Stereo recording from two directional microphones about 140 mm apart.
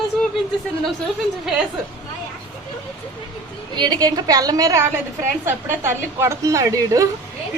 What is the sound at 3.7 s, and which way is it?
A woman's voice, 30° right (ahead or behind).